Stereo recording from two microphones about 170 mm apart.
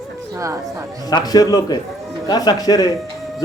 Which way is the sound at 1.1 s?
20° left (ahead or behind).